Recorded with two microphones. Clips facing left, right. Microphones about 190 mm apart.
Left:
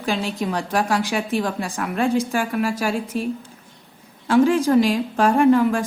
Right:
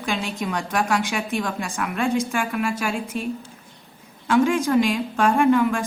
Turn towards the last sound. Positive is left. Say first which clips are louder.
# left 2 dB
turn(degrees=35)  # may be behind; listen again after turning